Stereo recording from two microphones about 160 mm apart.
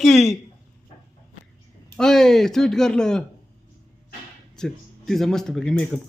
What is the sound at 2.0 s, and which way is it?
Speech, 5° left (ahead or behind).